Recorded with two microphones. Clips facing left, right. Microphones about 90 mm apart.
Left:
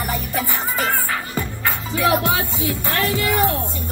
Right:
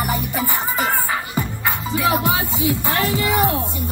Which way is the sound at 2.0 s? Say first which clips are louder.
Left 1 dB; centre (ahead or behind).